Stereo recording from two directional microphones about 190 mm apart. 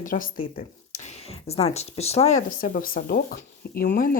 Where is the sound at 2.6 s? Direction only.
50° left (ahead or behind).